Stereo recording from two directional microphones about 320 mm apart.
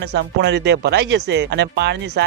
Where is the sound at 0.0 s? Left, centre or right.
Right.